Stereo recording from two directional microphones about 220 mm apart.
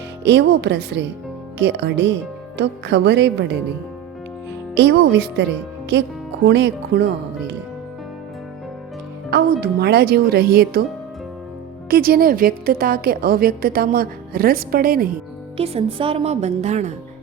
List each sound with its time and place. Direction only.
0.3 s speech: 50° right (ahead or behind)
4.7 s speech: 50° right (ahead or behind)
9.3 s speech: 45° right (ahead or behind)
11.9 s a woman's voice: 45° right (ahead or behind)
15.5 s a woman's voice: 25° right (ahead or behind)